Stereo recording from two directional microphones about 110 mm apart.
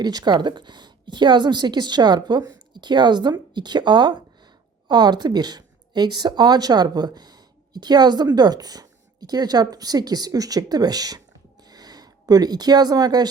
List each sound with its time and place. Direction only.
0.0 s a woman's voice: 40° right (ahead or behind)